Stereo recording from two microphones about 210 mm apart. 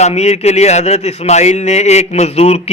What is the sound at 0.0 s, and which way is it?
A man's voice, 30° left (ahead or behind).